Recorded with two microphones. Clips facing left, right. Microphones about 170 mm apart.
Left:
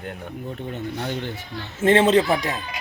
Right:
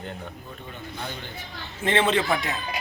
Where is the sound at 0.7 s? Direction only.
70° left (ahead or behind).